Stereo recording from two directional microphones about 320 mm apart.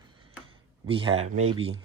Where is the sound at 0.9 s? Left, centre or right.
Centre.